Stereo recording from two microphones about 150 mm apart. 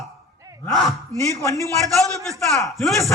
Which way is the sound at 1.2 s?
20° left (ahead or behind).